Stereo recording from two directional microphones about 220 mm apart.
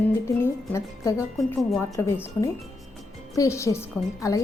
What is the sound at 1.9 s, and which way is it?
A woman's voice, 10° left (ahead or behind).